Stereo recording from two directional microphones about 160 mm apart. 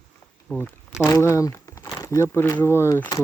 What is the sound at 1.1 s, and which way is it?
Speech, 20° left (ahead or behind).